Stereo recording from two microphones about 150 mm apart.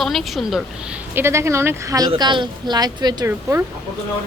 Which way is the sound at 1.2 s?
20° right (ahead or behind).